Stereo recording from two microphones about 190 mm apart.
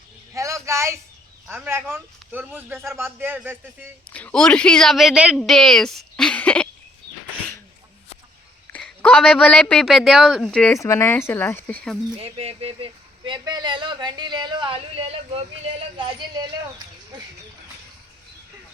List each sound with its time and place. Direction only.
0.3 s a sound: 15° right (ahead or behind)
1.5 s a man's voice: 10° right (ahead or behind)
4.1 s speech: 5° left (ahead or behind)
8.7 s speech: 5° left (ahead or behind)
12.1 s speech: 30° right (ahead or behind)